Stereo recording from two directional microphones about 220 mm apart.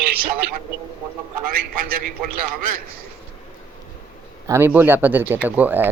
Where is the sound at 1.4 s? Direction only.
40° right (ahead or behind).